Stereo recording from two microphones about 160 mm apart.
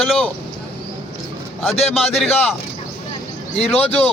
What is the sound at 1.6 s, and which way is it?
Speech, centre (ahead or behind).